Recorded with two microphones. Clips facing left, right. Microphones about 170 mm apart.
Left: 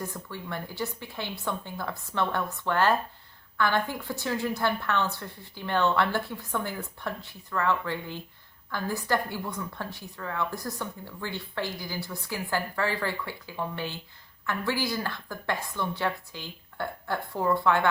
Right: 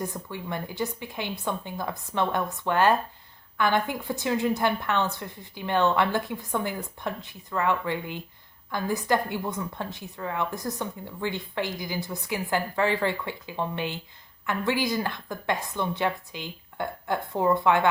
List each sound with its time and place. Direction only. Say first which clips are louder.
0.0 s a woman's voice: right 3 dB; 15° right (ahead or behind)